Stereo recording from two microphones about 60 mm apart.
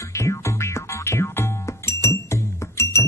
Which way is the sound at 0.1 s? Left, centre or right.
Left.